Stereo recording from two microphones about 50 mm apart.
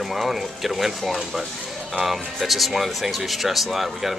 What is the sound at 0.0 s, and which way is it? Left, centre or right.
Speech, centre.